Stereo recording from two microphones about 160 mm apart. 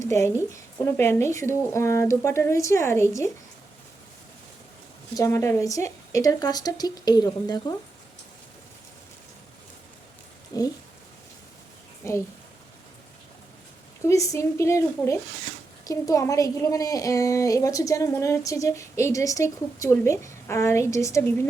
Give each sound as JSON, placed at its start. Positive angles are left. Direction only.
{"t": 0.0, "sound": "speech", "side_deg": 15}
{"t": 5.1, "sound": "a woman's voice", "side_deg": 20}
{"t": 10.5, "sound": "a woman's voice", "side_deg": 25}
{"t": 12.0, "sound": "speech", "side_deg": 15}
{"t": 14.0, "sound": "a woman's voice", "side_deg": 20}